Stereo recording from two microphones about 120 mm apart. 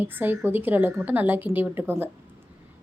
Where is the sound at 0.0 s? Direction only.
15° right (ahead or behind).